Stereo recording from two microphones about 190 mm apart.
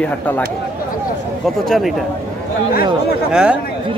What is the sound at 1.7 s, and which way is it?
Speech, centre (ahead or behind).